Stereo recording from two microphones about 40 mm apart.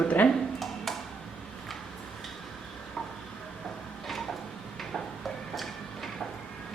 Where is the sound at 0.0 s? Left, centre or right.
Left.